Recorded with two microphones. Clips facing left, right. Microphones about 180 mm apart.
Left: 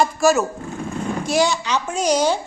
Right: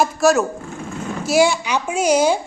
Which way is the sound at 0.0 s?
Centre (ahead or behind).